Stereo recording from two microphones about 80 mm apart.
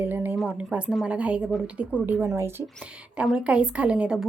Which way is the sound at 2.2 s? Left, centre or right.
Right.